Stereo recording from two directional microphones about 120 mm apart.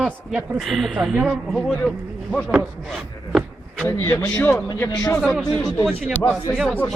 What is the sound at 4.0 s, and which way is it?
Speech, 25° left (ahead or behind).